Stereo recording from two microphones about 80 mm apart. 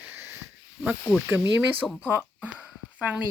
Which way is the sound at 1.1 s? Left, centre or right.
Left.